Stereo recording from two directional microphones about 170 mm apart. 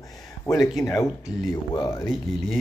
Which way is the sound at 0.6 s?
5° left (ahead or behind).